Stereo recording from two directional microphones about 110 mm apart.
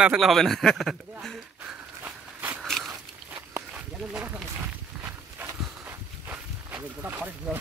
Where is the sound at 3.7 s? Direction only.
10° right (ahead or behind).